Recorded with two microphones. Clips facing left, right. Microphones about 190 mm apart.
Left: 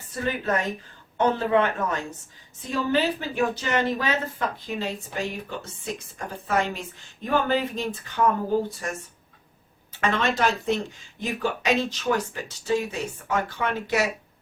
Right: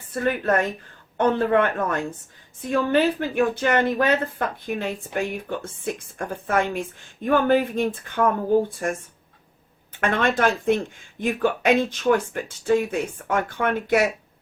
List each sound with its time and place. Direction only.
0.1 s a woman's voice: 55° right (ahead or behind)